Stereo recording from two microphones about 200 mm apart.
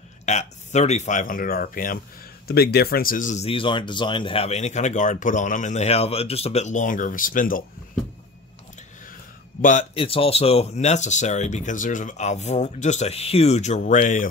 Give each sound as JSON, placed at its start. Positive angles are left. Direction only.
{"t": 0.2, "sound": "speech", "side_deg": 35}
{"t": 9.6, "sound": "speech", "side_deg": 40}
{"t": 9.9, "sound": "speech", "side_deg": 30}